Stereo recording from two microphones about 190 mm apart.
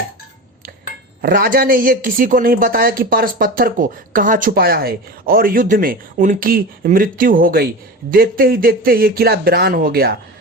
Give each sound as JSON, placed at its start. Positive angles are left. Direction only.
{"t": 1.2, "sound": "speech", "side_deg": -50}